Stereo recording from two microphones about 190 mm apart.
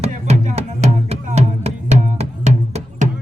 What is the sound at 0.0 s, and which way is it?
Music, 35° right (ahead or behind).